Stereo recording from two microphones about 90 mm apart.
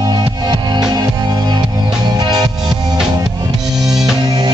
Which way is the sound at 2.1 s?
55° right (ahead or behind).